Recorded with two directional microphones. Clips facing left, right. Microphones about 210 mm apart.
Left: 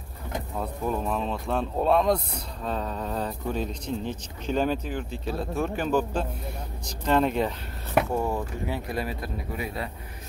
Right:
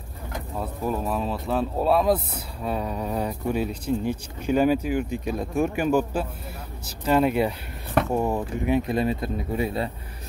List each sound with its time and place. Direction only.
0.6 s speech: 5° right (ahead or behind); by 9.8 s 25° right (ahead or behind)